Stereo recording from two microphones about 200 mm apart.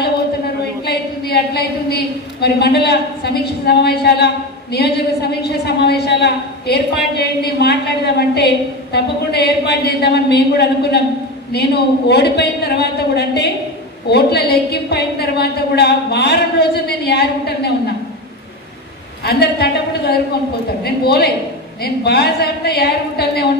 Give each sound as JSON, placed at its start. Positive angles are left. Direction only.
{"t": 0.8, "sound": "a sound", "side_deg": 55}
{"t": 3.6, "sound": "a woman's voice", "side_deg": 55}
{"t": 19.2, "sound": "a woman's voice", "side_deg": 55}